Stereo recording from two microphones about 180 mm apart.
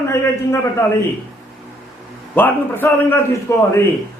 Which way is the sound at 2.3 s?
10° left (ahead or behind).